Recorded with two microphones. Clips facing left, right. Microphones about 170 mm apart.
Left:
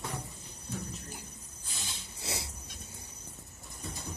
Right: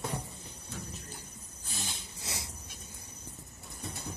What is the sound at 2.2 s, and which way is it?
Goat, 30° left (ahead or behind).